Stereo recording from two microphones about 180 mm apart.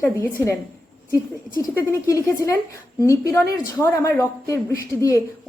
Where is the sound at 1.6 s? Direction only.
15° left (ahead or behind).